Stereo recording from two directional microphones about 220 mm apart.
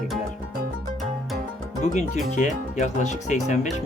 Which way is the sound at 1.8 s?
35° left (ahead or behind).